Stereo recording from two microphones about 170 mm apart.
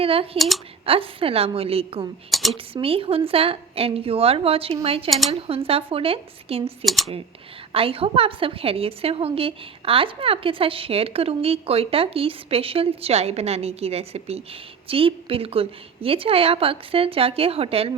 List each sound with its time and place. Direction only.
0.0 s a woman's voice: 35° right (ahead or behind)
0.3 s speech: centre (ahead or behind)
0.9 s a woman's voice: 35° right (ahead or behind)
2.3 s speech: centre (ahead or behind)
2.7 s a woman's voice: 35° right (ahead or behind)
6.8 s speech: centre (ahead or behind)
7.7 s a woman's voice: 35° right (ahead or behind)